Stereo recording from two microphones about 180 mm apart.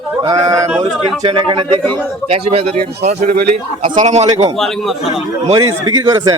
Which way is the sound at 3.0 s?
45° right (ahead or behind).